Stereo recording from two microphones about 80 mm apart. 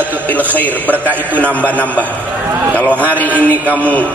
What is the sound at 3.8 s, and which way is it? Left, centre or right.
Speech, centre.